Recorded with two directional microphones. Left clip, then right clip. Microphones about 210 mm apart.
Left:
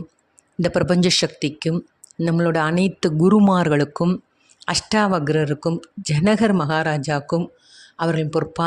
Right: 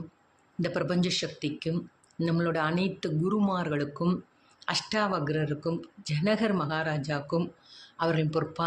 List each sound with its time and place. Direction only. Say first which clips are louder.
0.6 s speech: left 11 dB; 45° left (ahead or behind)